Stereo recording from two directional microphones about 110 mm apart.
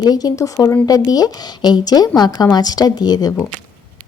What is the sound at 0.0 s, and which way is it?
Speech, 35° left (ahead or behind).